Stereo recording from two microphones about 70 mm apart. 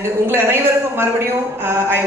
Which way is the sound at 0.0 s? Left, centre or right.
Right.